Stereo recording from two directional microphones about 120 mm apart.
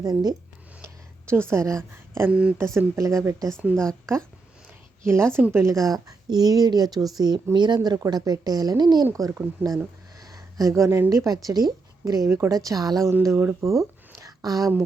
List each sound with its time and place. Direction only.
0.0 s a woman's voice: 30° right (ahead or behind)
1.3 s a woman's voice: 20° right (ahead or behind)
2.7 s a woman's voice: 25° right (ahead or behind)
5.0 s a woman's voice: 20° right (ahead or behind)